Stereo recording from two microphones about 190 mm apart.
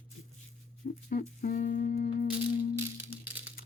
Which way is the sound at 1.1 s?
45° left (ahead or behind).